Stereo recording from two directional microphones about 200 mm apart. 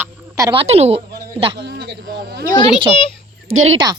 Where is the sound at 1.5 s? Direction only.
55° right (ahead or behind).